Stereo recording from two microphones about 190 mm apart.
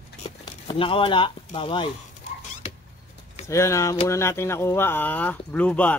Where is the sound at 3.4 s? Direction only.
15° left (ahead or behind).